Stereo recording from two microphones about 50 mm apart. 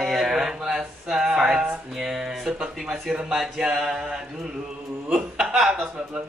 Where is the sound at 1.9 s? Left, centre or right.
Centre.